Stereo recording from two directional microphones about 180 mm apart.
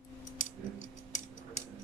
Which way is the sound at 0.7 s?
45° left (ahead or behind).